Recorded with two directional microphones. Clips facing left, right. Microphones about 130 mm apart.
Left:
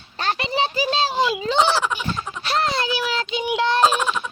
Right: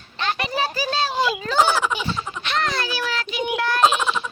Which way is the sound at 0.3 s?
25° left (ahead or behind).